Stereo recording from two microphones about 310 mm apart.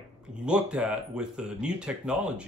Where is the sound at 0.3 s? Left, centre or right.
Centre.